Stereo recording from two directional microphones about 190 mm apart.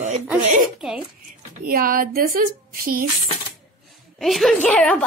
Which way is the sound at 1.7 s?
50° right (ahead or behind).